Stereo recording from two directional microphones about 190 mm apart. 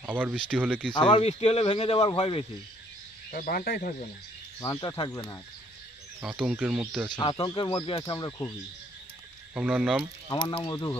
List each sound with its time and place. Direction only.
0.0 s speech: 5° right (ahead or behind)
0.9 s speech: 25° left (ahead or behind)
3.3 s speech: 50° left (ahead or behind)
4.6 s speech: 20° left (ahead or behind)
6.2 s speech: 5° right (ahead or behind)
7.1 s speech: 20° left (ahead or behind)
9.5 s speech: 5° right (ahead or behind)
10.3 s speech: 25° left (ahead or behind)